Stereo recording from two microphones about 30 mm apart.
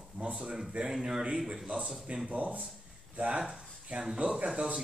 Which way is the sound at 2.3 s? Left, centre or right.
Right.